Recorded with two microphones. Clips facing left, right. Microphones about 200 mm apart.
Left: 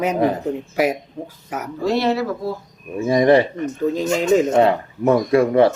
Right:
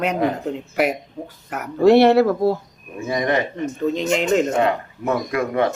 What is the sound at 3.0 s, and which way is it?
Speech, 30° left (ahead or behind).